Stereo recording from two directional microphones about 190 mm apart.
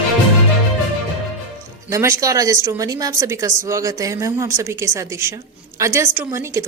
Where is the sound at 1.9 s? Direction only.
15° right (ahead or behind).